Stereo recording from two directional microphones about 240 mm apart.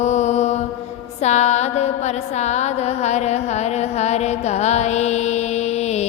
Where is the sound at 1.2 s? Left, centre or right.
Left.